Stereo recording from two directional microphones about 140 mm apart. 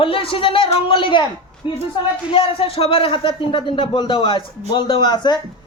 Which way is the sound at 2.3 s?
40° left (ahead or behind).